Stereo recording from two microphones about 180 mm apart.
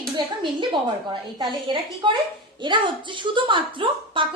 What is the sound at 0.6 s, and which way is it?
A woman's voice, 25° right (ahead or behind).